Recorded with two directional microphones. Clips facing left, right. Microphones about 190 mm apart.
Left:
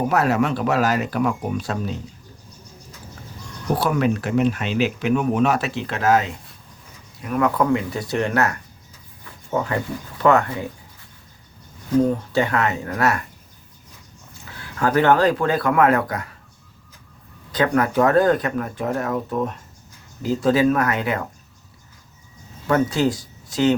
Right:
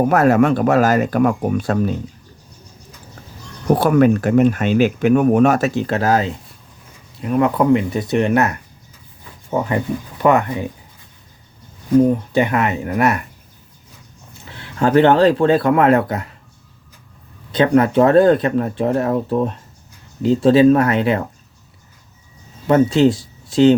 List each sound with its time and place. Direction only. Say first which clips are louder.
0.1 s speech: right 6 dB; 50° right (ahead or behind)
3.8 s speech: right 7 dB; 50° right (ahead or behind); by 10.7 s 15° right (ahead or behind)
12.0 s speech: right 4 dB; 15° right (ahead or behind)
14.5 s speech: right 6 dB; 25° right (ahead or behind)
17.5 s speech: right 6 dB; 25° right (ahead or behind)
22.6 s speech: right 6 dB; 20° right (ahead or behind)